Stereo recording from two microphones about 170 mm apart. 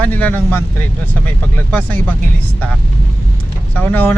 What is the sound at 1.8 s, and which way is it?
Speech, 10° left (ahead or behind).